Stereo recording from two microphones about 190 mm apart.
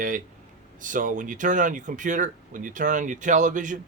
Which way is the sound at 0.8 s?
45° right (ahead or behind).